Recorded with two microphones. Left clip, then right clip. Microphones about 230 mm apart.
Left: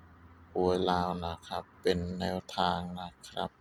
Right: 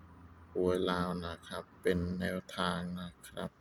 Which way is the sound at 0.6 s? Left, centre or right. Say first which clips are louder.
Left 4 dB; centre.